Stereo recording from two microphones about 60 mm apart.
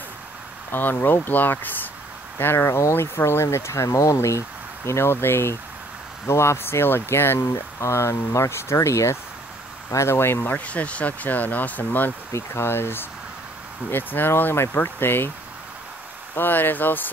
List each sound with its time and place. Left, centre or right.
0.7 s speech: left
2.3 s speech: left
3.8 s speech: left
7.9 s speech: left
10.4 s speech: left
12.3 s speech: left
16.3 s speech: left